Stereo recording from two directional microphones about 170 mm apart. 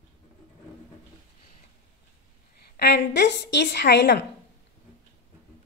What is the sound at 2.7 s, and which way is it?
A woman's voice, 80° left.